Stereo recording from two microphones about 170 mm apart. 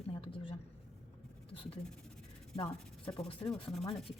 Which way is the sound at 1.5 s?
35° left (ahead or behind).